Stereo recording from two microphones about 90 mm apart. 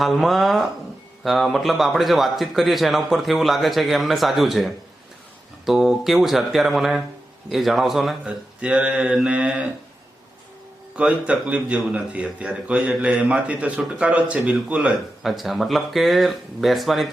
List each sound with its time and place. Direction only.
0.0 s a man's voice: centre (ahead or behind)
8.2 s a man's voice: 15° right (ahead or behind)
10.9 s a man's voice: 15° right (ahead or behind)
15.2 s a man's voice: centre (ahead or behind)